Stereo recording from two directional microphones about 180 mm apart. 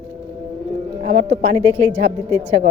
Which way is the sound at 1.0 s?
40° right (ahead or behind).